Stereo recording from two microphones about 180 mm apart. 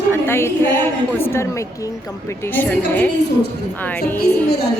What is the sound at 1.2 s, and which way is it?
Speech, 15° left (ahead or behind).